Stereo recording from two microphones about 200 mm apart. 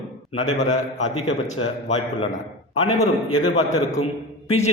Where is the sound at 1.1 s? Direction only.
30° left (ahead or behind).